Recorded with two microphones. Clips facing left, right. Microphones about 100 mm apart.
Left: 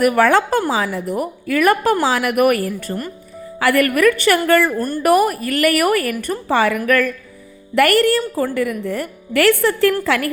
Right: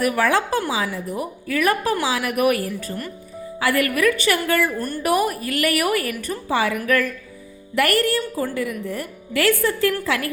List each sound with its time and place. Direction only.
0.0 s a woman's voice: 55° left (ahead or behind)
3.8 s a woman's voice: 55° left (ahead or behind)